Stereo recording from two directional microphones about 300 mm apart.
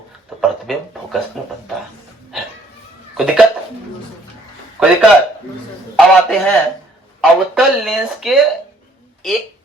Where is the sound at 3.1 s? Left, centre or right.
Centre.